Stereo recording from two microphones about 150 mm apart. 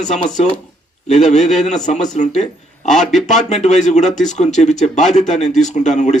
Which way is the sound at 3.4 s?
50° left (ahead or behind).